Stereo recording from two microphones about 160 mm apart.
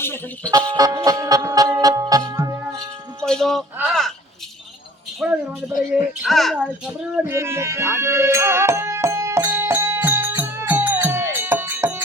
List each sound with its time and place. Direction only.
0.0 s speech: 15° left (ahead or behind)
0.5 s music: 20° right (ahead or behind)
3.2 s a sound: 5° left (ahead or behind)
5.2 s a woman's voice: 5° right (ahead or behind)
6.2 s music: centre (ahead or behind)